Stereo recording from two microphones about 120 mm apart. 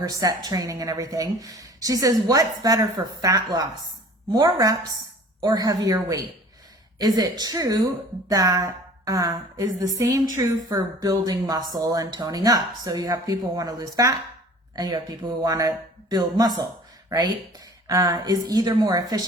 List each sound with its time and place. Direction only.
0.0 s a woman's voice: 30° right (ahead or behind)
17.8 s speech: 30° right (ahead or behind)